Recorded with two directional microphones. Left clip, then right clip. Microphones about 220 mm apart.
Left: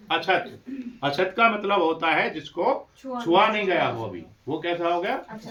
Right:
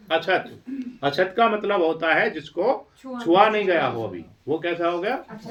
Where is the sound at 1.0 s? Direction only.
10° left (ahead or behind).